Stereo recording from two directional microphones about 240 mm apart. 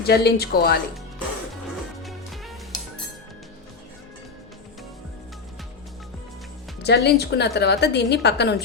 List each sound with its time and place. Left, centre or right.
0.0 s speech: left
2.0 s music: centre
6.8 s a woman's voice: left